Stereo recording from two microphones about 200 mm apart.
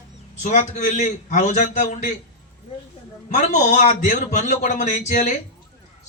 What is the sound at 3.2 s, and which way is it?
A man's voice, 40° left (ahead or behind).